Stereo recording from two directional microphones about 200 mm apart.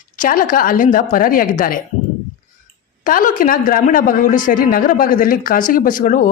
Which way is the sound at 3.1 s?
45° left (ahead or behind).